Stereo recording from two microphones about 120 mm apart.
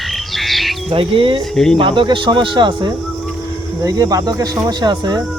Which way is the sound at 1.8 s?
45° right (ahead or behind).